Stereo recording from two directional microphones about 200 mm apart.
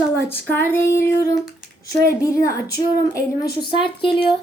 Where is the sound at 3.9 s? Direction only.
25° left (ahead or behind).